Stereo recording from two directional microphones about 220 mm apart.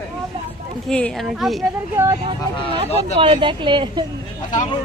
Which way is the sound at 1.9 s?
10° right (ahead or behind).